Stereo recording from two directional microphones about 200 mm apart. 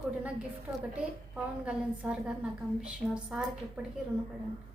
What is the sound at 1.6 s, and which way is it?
A woman's voice, 5° right (ahead or behind).